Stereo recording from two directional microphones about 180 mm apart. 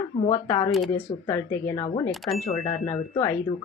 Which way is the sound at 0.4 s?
15° left (ahead or behind).